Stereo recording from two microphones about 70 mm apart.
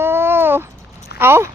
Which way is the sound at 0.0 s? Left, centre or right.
Right.